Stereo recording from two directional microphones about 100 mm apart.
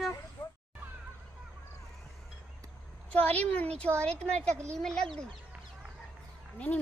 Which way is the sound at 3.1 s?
15° left (ahead or behind).